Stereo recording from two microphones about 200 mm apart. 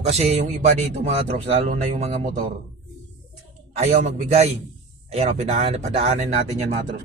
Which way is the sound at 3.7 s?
35° right (ahead or behind).